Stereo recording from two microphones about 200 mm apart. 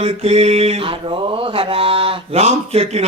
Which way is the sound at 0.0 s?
30° right (ahead or behind).